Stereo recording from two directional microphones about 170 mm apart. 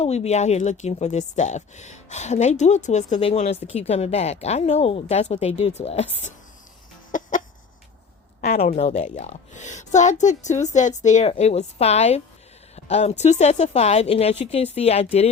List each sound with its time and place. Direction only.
0.0 s speech: 40° left (ahead or behind)
7.1 s chicken: 50° left (ahead or behind)
8.4 s a sound: 60° left (ahead or behind)
8.7 s a woman's voice: 40° left (ahead or behind)